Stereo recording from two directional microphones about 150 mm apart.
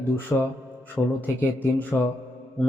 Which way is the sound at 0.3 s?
10° left (ahead or behind).